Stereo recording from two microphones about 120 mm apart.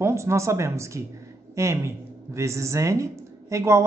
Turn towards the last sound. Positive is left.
turn(degrees=-25)  # may be behind; listen again after turning